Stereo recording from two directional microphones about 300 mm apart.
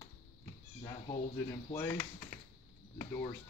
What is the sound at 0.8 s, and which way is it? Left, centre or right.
Speech, centre.